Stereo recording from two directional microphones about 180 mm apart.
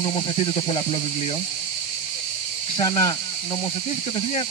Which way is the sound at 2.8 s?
25° left (ahead or behind).